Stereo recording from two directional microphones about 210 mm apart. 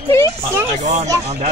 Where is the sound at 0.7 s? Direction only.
35° right (ahead or behind).